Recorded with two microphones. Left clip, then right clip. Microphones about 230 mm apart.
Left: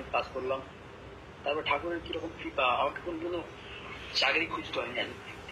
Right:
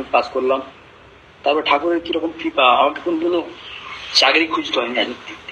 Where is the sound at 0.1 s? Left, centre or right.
Right.